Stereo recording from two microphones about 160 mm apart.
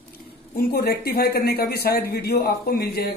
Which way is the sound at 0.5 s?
75° left (ahead or behind).